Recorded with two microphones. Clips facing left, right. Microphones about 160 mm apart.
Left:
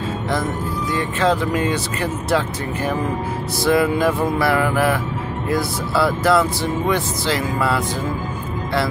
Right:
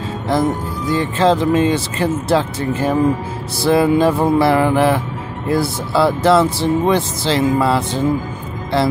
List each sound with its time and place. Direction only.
0.3 s speech: 30° right (ahead or behind)